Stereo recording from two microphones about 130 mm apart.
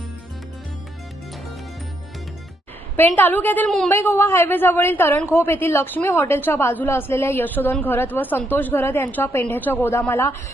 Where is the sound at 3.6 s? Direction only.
Centre (ahead or behind).